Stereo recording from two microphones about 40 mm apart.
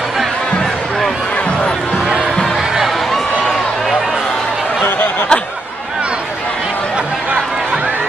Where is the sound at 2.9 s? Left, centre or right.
Centre.